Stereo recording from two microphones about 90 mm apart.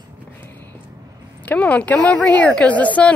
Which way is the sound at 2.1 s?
15° left (ahead or behind).